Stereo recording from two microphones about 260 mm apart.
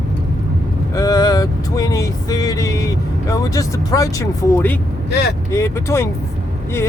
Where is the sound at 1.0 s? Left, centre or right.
Centre.